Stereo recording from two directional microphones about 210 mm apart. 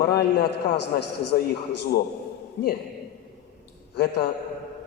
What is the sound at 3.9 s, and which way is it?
Speech, 50° left (ahead or behind).